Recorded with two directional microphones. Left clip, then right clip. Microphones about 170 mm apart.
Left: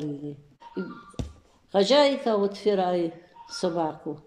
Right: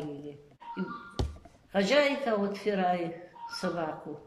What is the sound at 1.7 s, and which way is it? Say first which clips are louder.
Speech: left 6 dB; 35° left (ahead or behind).